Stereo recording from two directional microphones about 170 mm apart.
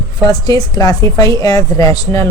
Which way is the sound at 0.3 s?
25° left (ahead or behind).